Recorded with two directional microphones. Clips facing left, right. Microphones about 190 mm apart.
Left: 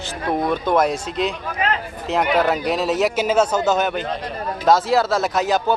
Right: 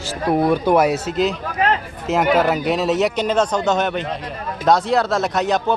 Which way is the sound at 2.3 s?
Centre (ahead or behind).